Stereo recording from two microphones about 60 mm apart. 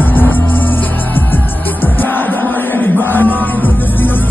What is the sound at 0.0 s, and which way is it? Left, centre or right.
Music, left.